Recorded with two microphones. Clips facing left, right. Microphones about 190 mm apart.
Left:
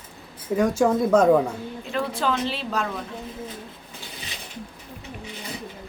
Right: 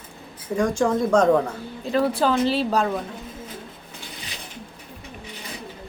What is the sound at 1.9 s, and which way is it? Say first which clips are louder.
Speech: right 5 dB; 35° right (ahead or behind).